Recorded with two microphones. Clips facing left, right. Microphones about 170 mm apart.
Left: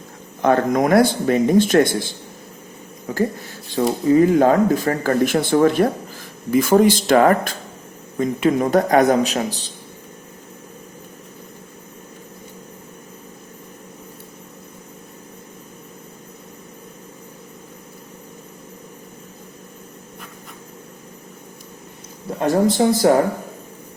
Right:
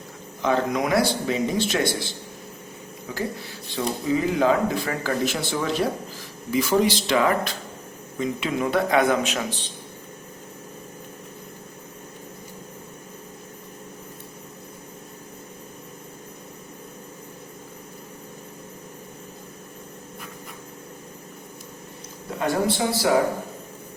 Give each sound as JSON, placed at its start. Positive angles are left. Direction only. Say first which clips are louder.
{"t": 0.4, "sound": "speech", "louder": "left 6 dB", "side_deg": 50}
{"t": 3.2, "sound": "a man's voice", "louder": "left 8 dB", "side_deg": 50}
{"t": 22.4, "sound": "a sound", "louder": "left 6 dB", "side_deg": 40}